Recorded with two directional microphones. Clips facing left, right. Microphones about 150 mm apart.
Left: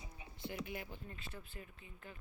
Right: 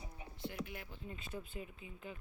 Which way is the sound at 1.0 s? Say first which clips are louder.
Right 5 dB; 15° right (ahead or behind).